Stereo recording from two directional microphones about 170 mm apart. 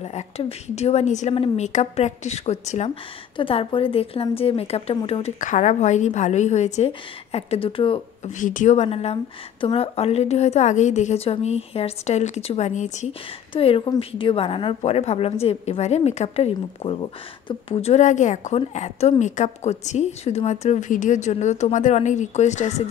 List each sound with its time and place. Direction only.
0.0 s a woman's voice: 35° left (ahead or behind)
8.3 s a woman's voice: 50° left (ahead or behind)
13.5 s a woman's voice: 35° left (ahead or behind)